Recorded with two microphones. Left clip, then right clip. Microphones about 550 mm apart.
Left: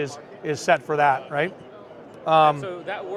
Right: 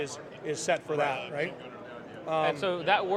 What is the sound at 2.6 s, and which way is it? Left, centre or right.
Speech, right.